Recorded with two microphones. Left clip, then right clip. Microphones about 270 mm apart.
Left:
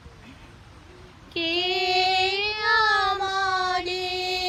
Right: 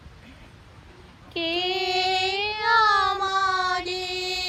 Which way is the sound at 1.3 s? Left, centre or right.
Right.